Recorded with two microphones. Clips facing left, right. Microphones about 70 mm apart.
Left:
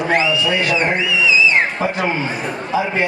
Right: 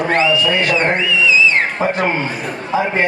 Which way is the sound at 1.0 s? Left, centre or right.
Centre.